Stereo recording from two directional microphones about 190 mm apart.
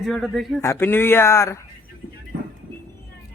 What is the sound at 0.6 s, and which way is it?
Speech, 15° left (ahead or behind).